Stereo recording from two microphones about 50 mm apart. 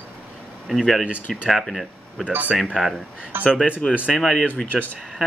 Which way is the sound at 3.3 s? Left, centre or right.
Right.